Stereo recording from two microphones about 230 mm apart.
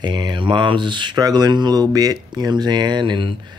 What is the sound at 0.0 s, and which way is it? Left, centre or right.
Speech, centre.